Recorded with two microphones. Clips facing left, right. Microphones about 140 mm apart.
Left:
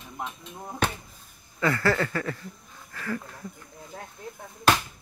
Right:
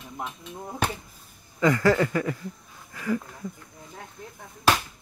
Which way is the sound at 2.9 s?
15° right (ahead or behind).